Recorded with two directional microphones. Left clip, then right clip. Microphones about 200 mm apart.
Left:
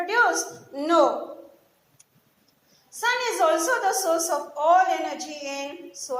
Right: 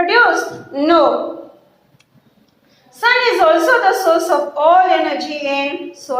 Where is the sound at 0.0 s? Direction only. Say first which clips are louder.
Right 10 dB; 55° left (ahead or behind).